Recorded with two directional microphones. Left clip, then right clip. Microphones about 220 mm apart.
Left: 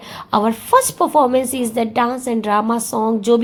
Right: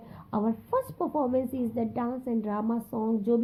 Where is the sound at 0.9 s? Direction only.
45° left (ahead or behind).